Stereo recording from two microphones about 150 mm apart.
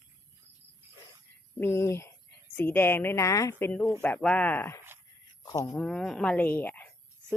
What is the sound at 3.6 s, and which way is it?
Speech, 5° left (ahead or behind).